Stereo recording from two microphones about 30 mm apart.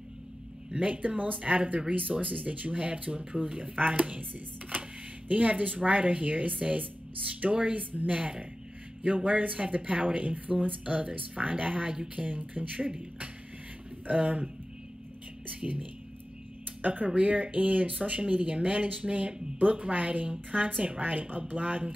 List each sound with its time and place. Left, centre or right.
0.7 s speech: right
3.7 s a woman's voice: right
14.0 s a woman's voice: right
15.6 s a woman's voice: right